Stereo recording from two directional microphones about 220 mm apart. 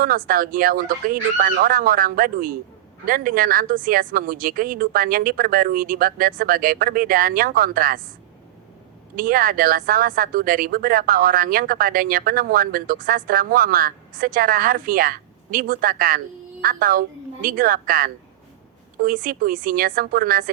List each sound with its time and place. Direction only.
0.0 s speech: 40° right (ahead or behind)
9.1 s speech: 40° right (ahead or behind)